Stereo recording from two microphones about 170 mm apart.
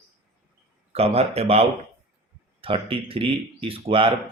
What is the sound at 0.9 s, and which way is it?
Speech, 35° right (ahead or behind).